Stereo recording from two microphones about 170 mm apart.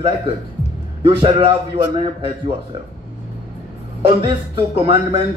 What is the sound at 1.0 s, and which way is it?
Speech, 30° right (ahead or behind).